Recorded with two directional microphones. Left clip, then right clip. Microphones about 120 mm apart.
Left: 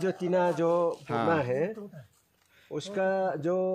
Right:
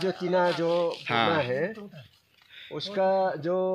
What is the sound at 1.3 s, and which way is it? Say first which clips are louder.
Speech: right 1 dB; 85° left.